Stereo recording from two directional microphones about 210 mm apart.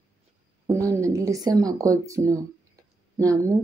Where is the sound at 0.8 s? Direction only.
15° right (ahead or behind).